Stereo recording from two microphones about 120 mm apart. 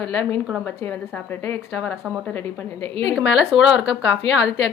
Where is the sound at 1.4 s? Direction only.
15° left (ahead or behind).